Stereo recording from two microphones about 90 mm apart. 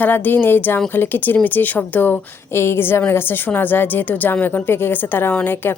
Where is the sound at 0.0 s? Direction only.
20° left (ahead or behind).